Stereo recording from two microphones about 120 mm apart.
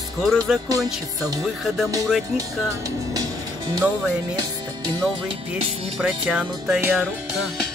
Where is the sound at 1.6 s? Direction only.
Centre (ahead or behind).